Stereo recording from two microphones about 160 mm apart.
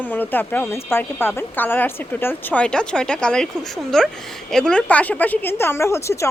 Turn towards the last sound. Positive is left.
turn(degrees=15)  # may be behind; listen again after turning